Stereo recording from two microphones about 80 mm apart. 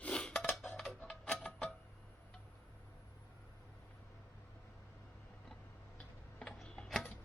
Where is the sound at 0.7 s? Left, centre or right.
Centre.